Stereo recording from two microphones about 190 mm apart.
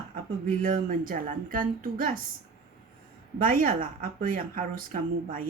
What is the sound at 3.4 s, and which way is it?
Speech, 50° right (ahead or behind).